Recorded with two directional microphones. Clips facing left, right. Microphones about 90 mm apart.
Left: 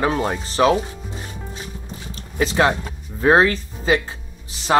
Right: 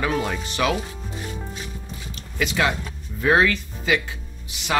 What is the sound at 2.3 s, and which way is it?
Speech, 35° left (ahead or behind).